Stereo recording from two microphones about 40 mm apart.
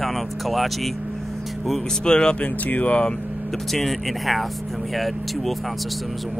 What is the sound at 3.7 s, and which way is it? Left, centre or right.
Speech, centre.